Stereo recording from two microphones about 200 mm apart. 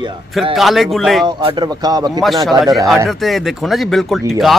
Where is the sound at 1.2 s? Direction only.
20° right (ahead or behind).